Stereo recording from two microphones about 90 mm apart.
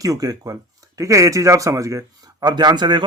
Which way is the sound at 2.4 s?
50° right (ahead or behind).